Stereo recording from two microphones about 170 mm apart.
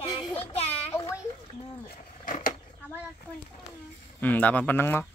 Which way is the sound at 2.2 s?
50° left (ahead or behind).